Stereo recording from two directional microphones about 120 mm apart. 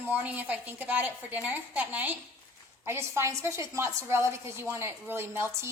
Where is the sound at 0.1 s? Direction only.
15° right (ahead or behind).